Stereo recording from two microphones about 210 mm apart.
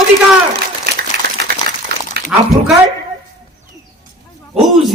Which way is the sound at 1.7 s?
50° right (ahead or behind).